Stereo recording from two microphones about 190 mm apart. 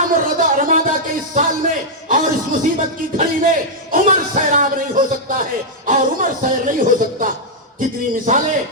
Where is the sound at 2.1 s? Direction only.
45° right (ahead or behind).